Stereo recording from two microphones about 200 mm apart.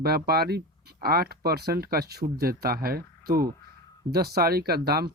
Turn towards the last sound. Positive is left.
turn(degrees=-50)  # may be behind; listen again after turning